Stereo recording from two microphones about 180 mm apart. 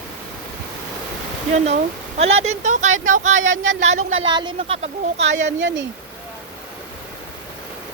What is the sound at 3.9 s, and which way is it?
Speech, 40° right (ahead or behind).